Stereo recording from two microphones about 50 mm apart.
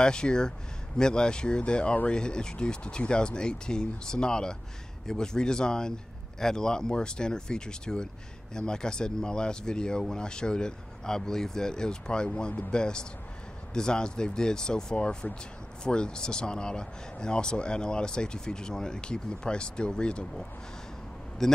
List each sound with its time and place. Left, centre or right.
0.0 s speech: centre
21.4 s speech: centre